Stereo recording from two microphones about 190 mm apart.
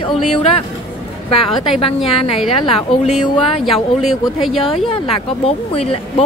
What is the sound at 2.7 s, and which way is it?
Speech, 30° left (ahead or behind).